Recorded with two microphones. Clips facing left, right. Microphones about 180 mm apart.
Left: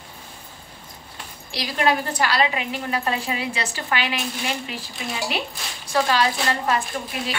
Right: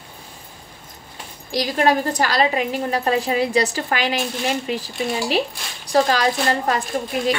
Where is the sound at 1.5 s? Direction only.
40° right (ahead or behind).